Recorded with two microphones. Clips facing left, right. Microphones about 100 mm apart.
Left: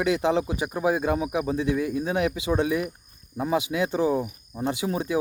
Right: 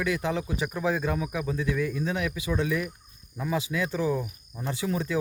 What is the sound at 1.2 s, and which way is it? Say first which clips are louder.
Speech: left 4 dB; 20° left (ahead or behind).